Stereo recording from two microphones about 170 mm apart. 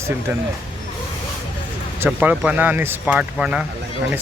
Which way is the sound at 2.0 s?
10° right (ahead or behind).